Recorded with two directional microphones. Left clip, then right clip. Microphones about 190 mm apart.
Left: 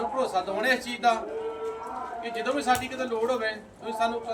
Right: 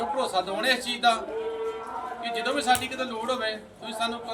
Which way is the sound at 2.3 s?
Centre (ahead or behind).